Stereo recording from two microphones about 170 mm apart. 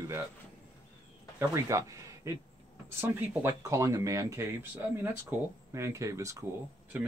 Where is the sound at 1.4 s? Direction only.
15° right (ahead or behind).